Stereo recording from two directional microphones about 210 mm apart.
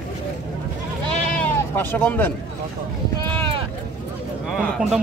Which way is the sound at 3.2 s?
25° right (ahead or behind).